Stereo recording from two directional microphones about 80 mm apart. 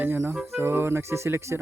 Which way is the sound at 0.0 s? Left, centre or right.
Right.